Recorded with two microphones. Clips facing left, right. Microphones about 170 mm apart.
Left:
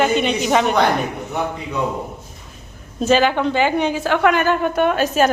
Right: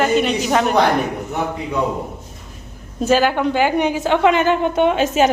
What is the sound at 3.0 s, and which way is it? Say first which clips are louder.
A woman's voice: even; 10° right (ahead or behind).